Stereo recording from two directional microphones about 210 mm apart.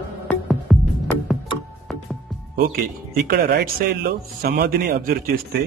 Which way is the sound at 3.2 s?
50° right (ahead or behind).